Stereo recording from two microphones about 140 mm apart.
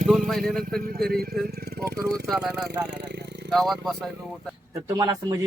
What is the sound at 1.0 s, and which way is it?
Speech, 90° right.